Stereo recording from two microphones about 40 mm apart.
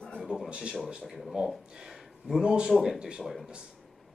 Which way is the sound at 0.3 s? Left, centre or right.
Right.